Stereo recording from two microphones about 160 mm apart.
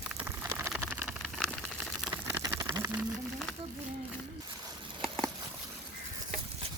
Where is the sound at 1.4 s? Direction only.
Centre (ahead or behind).